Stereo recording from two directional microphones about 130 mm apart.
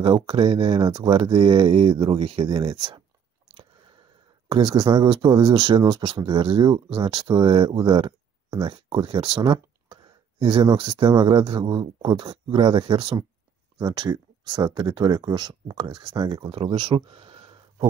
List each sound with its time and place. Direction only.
0.0 s speech: 35° right (ahead or behind)
4.6 s speech: 35° right (ahead or behind)